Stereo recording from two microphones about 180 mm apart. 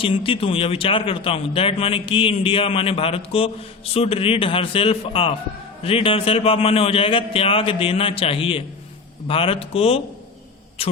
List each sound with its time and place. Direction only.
0.0 s speech: 30° left (ahead or behind)